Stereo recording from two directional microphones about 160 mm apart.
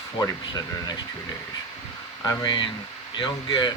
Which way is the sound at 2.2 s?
25° left (ahead or behind).